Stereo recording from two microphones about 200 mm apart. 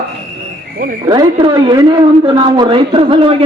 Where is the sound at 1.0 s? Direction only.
20° right (ahead or behind).